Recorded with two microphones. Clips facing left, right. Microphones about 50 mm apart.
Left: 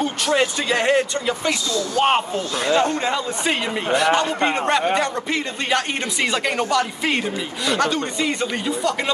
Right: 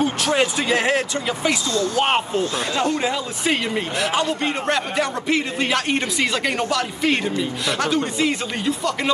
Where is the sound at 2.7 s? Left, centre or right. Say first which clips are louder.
Left 7 dB; left.